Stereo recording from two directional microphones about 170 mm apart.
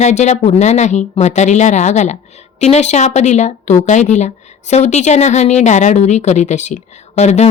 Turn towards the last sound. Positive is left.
turn(degrees=40)  # may be behind; listen again after turning